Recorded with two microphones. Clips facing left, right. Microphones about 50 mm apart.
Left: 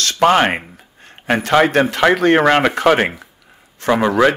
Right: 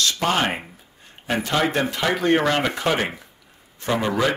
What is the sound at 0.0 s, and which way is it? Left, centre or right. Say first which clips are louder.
A man's voice: left 8 dB; left.